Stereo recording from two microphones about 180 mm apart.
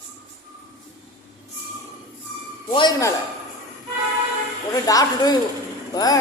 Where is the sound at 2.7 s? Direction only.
25° left (ahead or behind).